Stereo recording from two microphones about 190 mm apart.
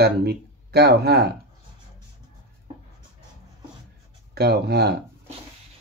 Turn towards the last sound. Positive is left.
turn(degrees=-55)  # may be behind; listen again after turning